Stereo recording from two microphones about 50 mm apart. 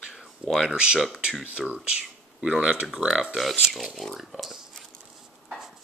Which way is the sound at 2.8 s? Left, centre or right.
Centre.